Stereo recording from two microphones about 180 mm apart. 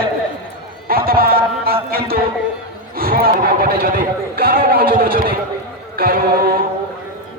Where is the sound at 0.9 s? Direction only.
55° right (ahead or behind).